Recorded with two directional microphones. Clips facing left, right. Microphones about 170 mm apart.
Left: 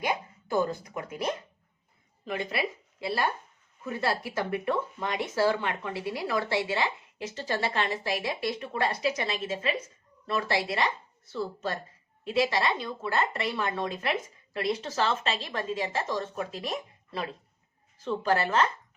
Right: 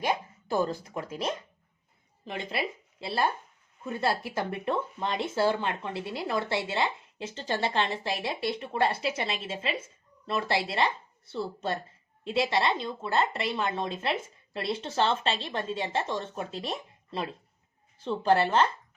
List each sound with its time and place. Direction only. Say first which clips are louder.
0.6 s a woman's voice: even; 30° right (ahead or behind)
4.0 s a woman's voice: right 1 dB; 25° right (ahead or behind)